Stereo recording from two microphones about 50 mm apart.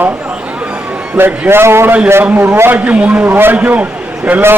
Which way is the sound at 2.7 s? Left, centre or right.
Right.